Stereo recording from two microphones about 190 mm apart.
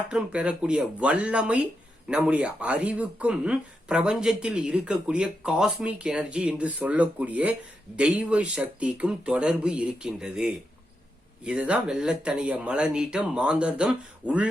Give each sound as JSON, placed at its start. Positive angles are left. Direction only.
{"t": 0.1, "sound": "speech", "side_deg": -5}